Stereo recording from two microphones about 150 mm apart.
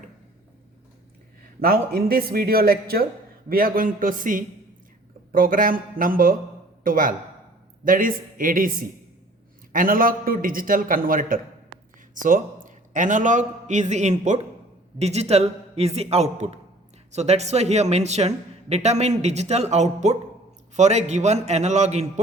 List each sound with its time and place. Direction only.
1.6 s speech: 85° right
3.5 s a man's voice: 75° right (ahead or behind)
9.7 s a man's voice: 70° right (ahead or behind); by 22.2 s 50° right (ahead or behind)